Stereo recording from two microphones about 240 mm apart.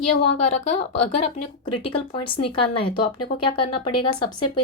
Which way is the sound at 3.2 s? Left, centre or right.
Left.